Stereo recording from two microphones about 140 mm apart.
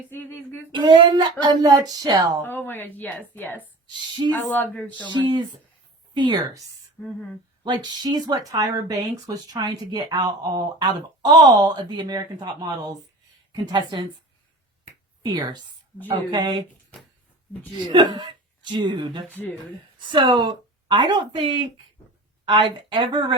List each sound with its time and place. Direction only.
0.1 s a sound: 15° left (ahead or behind)
0.7 s speech: 30° right (ahead or behind)
2.4 s a woman's voice: 15° left (ahead or behind)
5.0 s speech: 35° right (ahead or behind)
7.0 s a woman's voice: 15° left (ahead or behind)
7.6 s speech: 30° right (ahead or behind)
15.2 s speech: 30° right (ahead or behind)
17.8 s speech: 35° right (ahead or behind)
19.3 s a woman's voice: 10° left (ahead or behind)
20.1 s speech: 35° right (ahead or behind)